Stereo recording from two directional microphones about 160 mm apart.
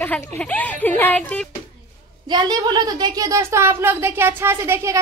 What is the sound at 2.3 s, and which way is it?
Speech, 25° right (ahead or behind).